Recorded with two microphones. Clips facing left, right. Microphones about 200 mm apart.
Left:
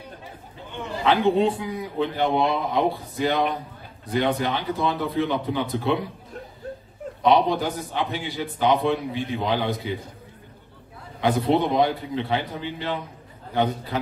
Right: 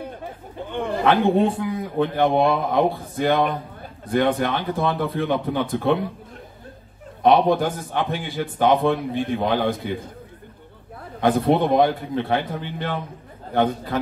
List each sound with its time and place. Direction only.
0.0 s a man's voice: 55° right (ahead or behind)
7.2 s a man's voice: 55° right (ahead or behind)
11.1 s a man's voice: 50° right (ahead or behind)